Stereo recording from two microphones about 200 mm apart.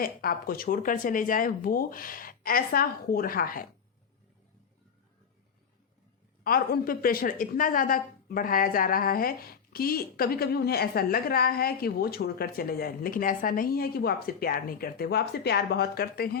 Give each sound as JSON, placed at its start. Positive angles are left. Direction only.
{"t": 0.0, "sound": "a woman's voice", "side_deg": 45}
{"t": 6.4, "sound": "a woman's voice", "side_deg": 45}